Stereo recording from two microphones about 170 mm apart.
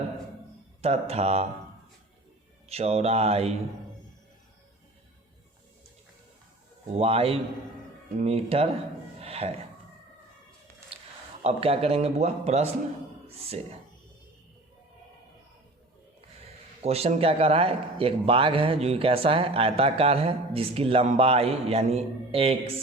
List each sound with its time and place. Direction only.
0.8 s speech: 35° right (ahead or behind)
2.6 s speech: 35° right (ahead or behind)
6.8 s speech: 35° right (ahead or behind)
9.2 s a sound: 35° right (ahead or behind)
10.9 s a sound: 35° right (ahead or behind)
11.4 s speech: 35° right (ahead or behind)
16.8 s speech: 40° right (ahead or behind)